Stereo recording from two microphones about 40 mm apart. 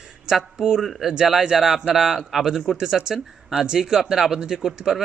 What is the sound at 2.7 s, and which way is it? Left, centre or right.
A man's voice, centre.